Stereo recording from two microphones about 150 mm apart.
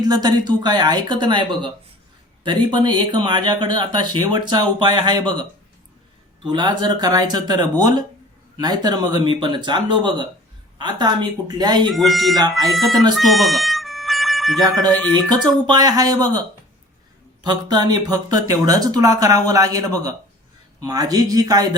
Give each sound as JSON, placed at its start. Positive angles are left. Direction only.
{"t": 0.0, "sound": "speech", "side_deg": -25}
{"t": 6.4, "sound": "speech", "side_deg": -30}
{"t": 11.9, "sound": "speech", "side_deg": 0}
{"t": 13.1, "sound": "music", "side_deg": 0}
{"t": 15.6, "sound": "speech", "side_deg": -25}
{"t": 17.4, "sound": "speech", "side_deg": -25}